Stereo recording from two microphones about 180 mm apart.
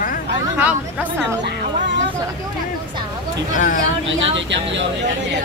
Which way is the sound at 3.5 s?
45° left (ahead or behind).